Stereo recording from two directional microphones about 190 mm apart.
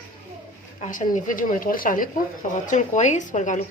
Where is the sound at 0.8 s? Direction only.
45° left (ahead or behind).